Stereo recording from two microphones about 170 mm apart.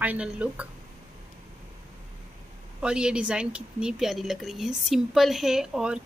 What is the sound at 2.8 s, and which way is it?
A woman's voice, 5° right (ahead or behind).